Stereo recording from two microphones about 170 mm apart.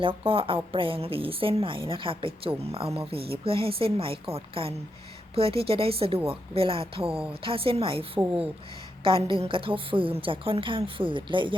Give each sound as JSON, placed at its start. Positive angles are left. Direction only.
{"t": 0.0, "sound": "a woman's voice", "side_deg": -30}